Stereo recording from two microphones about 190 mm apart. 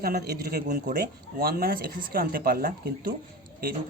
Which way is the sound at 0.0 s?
55° right (ahead or behind).